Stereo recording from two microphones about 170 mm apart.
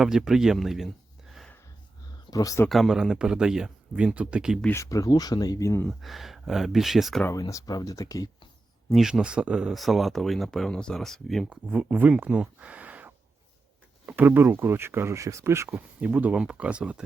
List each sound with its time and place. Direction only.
0.0 s speech: 5° right (ahead or behind)
1.3 s a sound: centre (ahead or behind)
2.3 s speech: 20° left (ahead or behind)
2.6 s speech: centre (ahead or behind)
4.6 s speech: 15° left (ahead or behind)
5.9 s speech: centre (ahead or behind)
7.3 s speech: 20° left (ahead or behind)
8.9 s speech: centre (ahead or behind)